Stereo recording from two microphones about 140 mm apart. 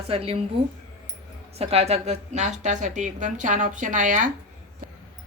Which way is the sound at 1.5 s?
45° right (ahead or behind).